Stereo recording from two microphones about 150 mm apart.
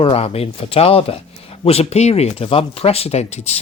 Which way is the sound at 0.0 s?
40° left (ahead or behind).